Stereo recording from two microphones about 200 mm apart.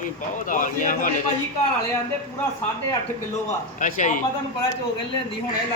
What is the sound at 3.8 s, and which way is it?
Speech, 40° left (ahead or behind).